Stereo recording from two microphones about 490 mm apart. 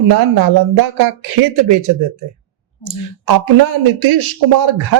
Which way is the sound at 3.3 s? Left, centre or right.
Right.